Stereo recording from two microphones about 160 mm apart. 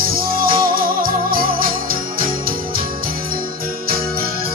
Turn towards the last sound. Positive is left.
turn(degrees=-70)  # may be behind; listen again after turning